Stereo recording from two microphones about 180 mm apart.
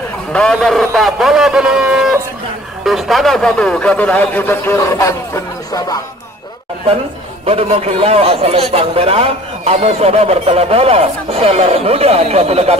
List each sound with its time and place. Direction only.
0.3 s a man's voice: 5° left (ahead or behind)
7.4 s a man's voice: 35° right (ahead or behind)